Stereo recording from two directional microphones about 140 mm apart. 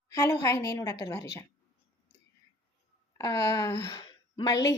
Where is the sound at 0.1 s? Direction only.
20° left (ahead or behind).